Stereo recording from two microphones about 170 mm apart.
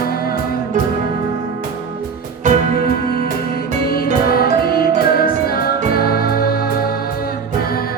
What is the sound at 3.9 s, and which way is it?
Music, 60° left (ahead or behind).